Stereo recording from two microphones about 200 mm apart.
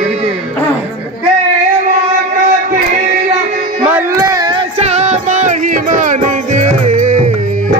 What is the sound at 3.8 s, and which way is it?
Music, 10° right (ahead or behind).